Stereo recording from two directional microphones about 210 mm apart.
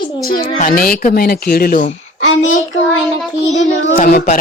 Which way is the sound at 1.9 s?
60° left (ahead or behind).